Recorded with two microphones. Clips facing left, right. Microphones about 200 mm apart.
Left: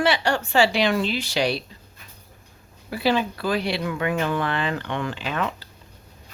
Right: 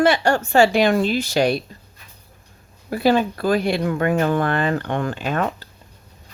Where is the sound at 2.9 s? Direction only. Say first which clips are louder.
Right 5 dB; 45° right (ahead or behind).